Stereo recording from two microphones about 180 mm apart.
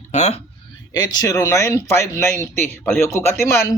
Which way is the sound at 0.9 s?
20° left (ahead or behind).